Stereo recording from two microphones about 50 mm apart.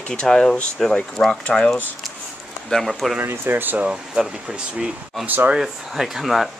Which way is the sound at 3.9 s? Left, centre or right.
Centre.